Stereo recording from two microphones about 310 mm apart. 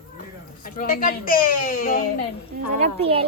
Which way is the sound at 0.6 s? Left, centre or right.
Left.